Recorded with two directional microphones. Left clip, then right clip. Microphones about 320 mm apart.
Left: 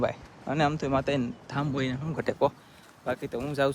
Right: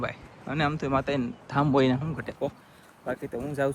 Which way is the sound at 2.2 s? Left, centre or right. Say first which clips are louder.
Left 6 dB; left.